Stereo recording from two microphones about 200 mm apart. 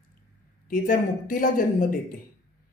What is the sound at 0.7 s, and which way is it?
Speech, 45° left (ahead or behind).